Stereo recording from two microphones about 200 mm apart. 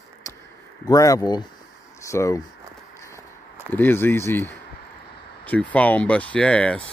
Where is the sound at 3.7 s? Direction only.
10° left (ahead or behind).